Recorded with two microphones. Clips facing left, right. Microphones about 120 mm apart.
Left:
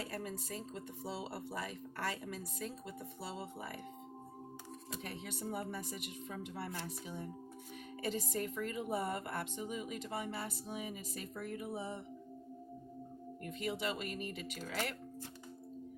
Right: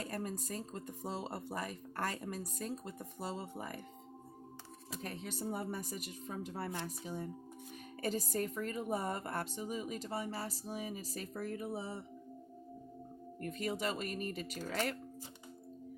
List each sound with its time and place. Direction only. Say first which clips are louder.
0.0 s speech: right 2 dB; 45° right (ahead or behind)
5.0 s speech: right 3 dB; 40° right (ahead or behind)
13.4 s speech: right 2 dB; 45° right (ahead or behind)